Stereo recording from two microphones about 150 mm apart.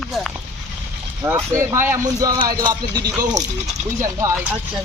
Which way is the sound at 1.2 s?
20° right (ahead or behind).